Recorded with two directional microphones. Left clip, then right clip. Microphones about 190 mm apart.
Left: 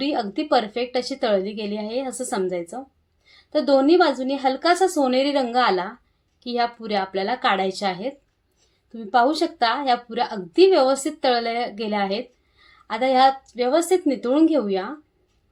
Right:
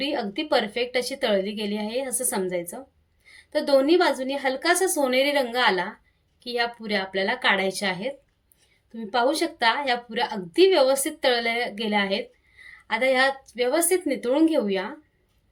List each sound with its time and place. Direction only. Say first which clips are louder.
0.0 s a woman's voice: left 3 dB; 5° right (ahead or behind)